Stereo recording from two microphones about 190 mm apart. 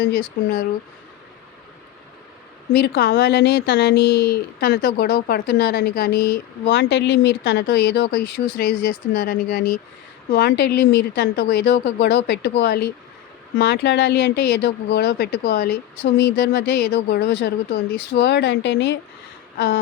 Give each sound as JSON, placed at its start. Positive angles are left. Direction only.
{"t": 0.0, "sound": "speech", "side_deg": 55}
{"t": 2.7, "sound": "speech", "side_deg": 60}
{"t": 19.5, "sound": "a sound", "side_deg": 60}